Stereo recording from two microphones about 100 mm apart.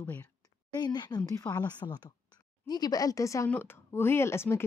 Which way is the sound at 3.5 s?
20° left (ahead or behind).